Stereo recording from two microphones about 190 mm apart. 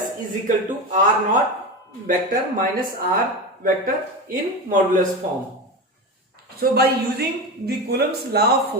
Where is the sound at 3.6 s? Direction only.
45° right (ahead or behind).